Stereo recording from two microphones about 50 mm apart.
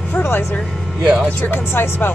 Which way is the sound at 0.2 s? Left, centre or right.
Left.